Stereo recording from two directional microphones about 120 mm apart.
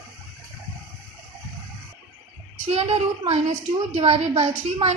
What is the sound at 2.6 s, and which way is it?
A woman's voice, 60° right (ahead or behind).